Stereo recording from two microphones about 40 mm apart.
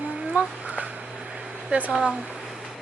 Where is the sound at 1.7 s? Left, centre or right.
Right.